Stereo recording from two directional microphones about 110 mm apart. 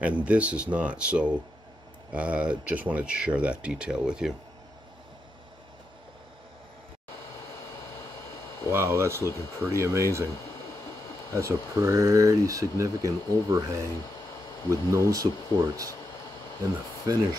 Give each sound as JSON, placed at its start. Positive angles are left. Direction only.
{"t": 0.0, "sound": "speech", "side_deg": -10}
{"t": 8.6, "sound": "speech", "side_deg": -25}
{"t": 11.3, "sound": "speech", "side_deg": -25}
{"t": 17.0, "sound": "speech", "side_deg": -35}